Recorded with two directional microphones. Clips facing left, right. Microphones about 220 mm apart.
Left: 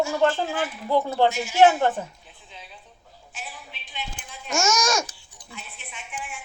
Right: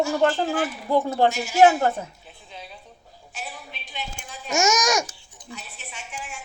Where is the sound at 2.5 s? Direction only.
40° right (ahead or behind).